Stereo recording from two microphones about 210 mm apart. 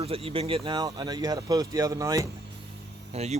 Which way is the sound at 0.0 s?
25° right (ahead or behind).